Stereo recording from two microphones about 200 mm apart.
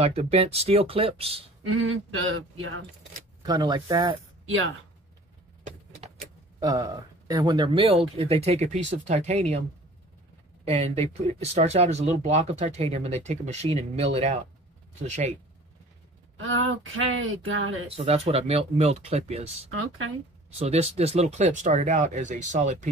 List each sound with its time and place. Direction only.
0.0 s speech: 30° right (ahead or behind)
2.0 s speech: 80° right
3.4 s speech: 20° right (ahead or behind)
6.6 s speech: 15° right (ahead or behind); by 9.6 s 35° right (ahead or behind)
10.6 s speech: 30° right (ahead or behind)
16.3 s speech: 90° right
17.8 s speech: 30° right (ahead or behind)
20.5 s speech: 30° right (ahead or behind)